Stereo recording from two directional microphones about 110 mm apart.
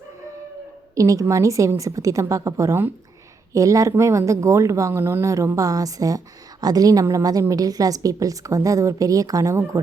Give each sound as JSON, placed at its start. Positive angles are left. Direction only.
{"t": 0.9, "sound": "a woman's voice", "side_deg": -30}